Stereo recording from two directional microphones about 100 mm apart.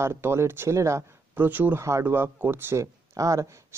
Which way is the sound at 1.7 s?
30° right (ahead or behind).